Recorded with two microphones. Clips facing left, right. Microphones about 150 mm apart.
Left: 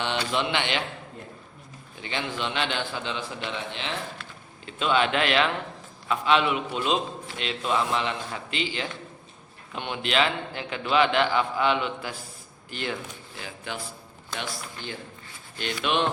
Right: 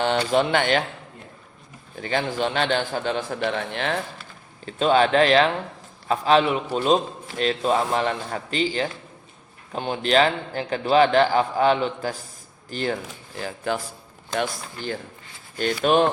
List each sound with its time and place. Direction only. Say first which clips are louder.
0.0 s a man's voice: right 7 dB; 45° right (ahead or behind)
2.0 s a man's voice: right 7 dB; 45° right (ahead or behind)
4.6 s a man's voice: right 5 dB; 40° right (ahead or behind)
15.5 s a man's voice: right 7 dB; 45° right (ahead or behind)